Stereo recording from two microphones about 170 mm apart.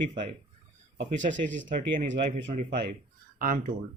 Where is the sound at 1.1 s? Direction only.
45° right (ahead or behind).